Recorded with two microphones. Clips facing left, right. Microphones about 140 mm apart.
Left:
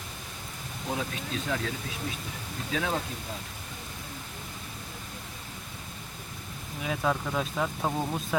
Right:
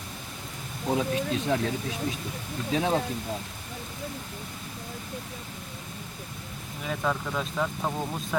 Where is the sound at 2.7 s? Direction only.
35° right (ahead or behind).